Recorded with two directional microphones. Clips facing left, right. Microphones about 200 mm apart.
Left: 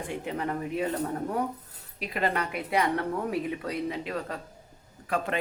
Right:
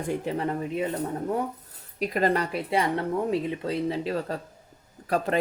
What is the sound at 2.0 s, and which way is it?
Speech, 40° right (ahead or behind).